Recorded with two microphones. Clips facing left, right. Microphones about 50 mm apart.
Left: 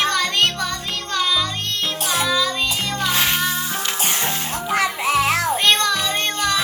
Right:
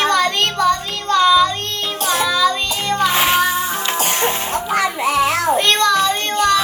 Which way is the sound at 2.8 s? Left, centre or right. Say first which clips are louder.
Right 6 dB; centre.